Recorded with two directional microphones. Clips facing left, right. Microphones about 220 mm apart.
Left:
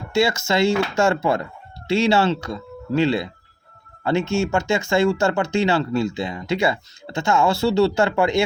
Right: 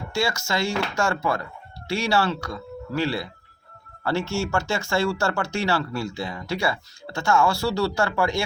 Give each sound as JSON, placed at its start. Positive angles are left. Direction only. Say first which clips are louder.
{"t": 0.1, "sound": "speech", "louder": "left 6 dB", "side_deg": 20}